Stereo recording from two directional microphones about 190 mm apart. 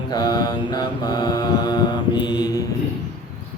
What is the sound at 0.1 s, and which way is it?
Mantra, 20° left (ahead or behind).